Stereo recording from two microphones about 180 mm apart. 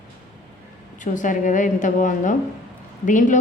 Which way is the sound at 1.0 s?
45° left (ahead or behind).